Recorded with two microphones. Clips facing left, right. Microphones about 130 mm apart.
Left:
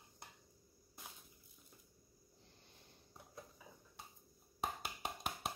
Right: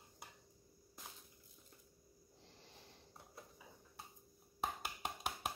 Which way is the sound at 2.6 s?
90° right.